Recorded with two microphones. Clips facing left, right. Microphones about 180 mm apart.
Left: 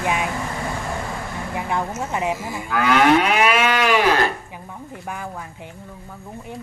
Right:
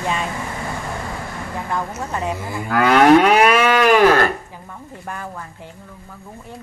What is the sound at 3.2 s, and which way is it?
Moo, 45° right (ahead or behind).